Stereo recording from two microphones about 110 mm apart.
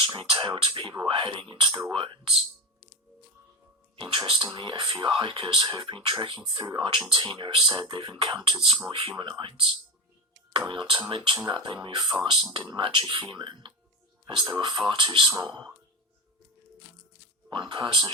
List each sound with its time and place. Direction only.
0.2 s speech: 45° right (ahead or behind)
3.9 s speech: 50° right (ahead or behind)
17.5 s speech: 45° right (ahead or behind)